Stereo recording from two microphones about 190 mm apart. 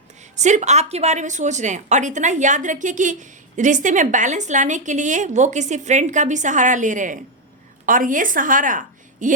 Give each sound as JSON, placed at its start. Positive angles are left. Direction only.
{"t": 0.3, "sound": "a woman's voice", "side_deg": -40}